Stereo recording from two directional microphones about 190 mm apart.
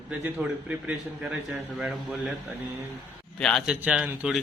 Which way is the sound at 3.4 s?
5° left (ahead or behind).